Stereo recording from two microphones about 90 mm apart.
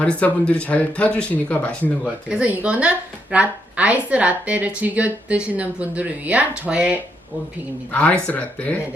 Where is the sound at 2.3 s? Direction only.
15° right (ahead or behind).